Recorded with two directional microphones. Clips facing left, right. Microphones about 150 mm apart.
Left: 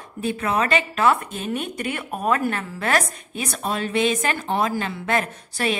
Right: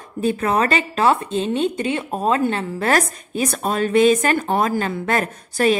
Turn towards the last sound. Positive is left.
turn(degrees=-45)  # may be behind; listen again after turning